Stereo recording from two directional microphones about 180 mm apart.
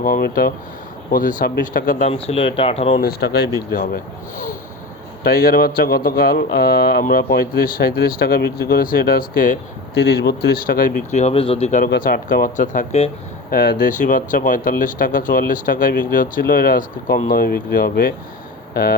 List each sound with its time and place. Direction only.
0.0 s speech: 55° left (ahead or behind)
2.1 s speech: 30° left (ahead or behind)
3.0 s speech: 60° left (ahead or behind)
10.0 s speech: 65° left (ahead or behind); by 11.9 s 40° left (ahead or behind)
11.9 s speech: 55° left (ahead or behind); by 13.1 s 40° left (ahead or behind)
13.5 s speech: 55° left (ahead or behind)